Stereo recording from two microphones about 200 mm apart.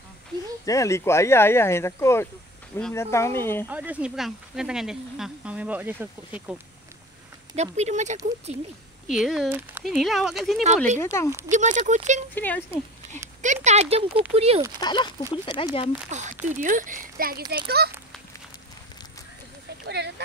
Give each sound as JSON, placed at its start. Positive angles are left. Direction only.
{"t": 0.7, "sound": "speech", "side_deg": 15}
{"t": 3.6, "sound": "speech", "side_deg": -10}
{"t": 7.5, "sound": "speech", "side_deg": -35}
{"t": 9.0, "sound": "speech", "side_deg": 0}
{"t": 11.0, "sound": "speech", "side_deg": 15}
{"t": 11.2, "sound": "speech", "side_deg": -15}
{"t": 11.5, "sound": "speech", "side_deg": -35}
{"t": 12.4, "sound": "speech", "side_deg": 10}
{"t": 13.4, "sound": "speech", "side_deg": -35}
{"t": 14.8, "sound": "speech", "side_deg": 20}
{"t": 16.1, "sound": "a child's voice", "side_deg": -35}